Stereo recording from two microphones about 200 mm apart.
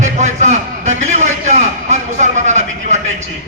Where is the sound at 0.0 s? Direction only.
35° right (ahead or behind).